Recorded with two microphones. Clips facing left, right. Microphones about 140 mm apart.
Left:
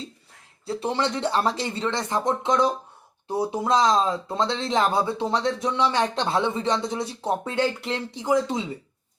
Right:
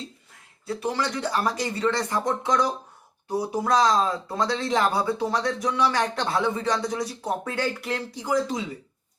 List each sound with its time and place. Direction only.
0.7 s speech: 25° left (ahead or behind)